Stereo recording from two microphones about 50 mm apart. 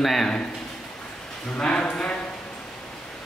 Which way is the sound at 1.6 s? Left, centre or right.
Centre.